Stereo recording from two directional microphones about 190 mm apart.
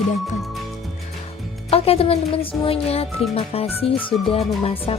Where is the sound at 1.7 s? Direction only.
30° left (ahead or behind).